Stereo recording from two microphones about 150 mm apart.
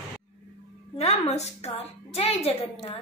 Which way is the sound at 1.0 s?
45° left (ahead or behind).